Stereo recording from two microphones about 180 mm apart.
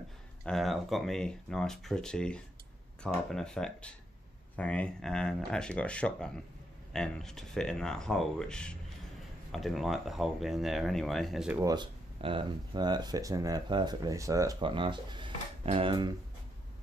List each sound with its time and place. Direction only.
0.5 s speech: centre (ahead or behind)
11.6 s speech: 25° right (ahead or behind)